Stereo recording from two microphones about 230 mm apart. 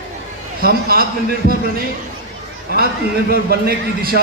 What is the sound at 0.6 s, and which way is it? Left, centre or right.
Speech, right.